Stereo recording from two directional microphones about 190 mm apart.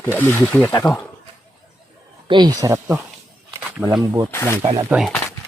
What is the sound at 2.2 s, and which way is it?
Speech, 25° right (ahead or behind).